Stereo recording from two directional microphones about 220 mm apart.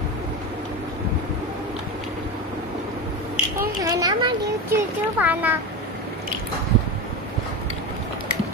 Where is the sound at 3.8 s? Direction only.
15° right (ahead or behind).